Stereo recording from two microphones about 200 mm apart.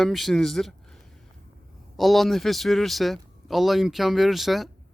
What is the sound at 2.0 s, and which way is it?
Speech, centre (ahead or behind).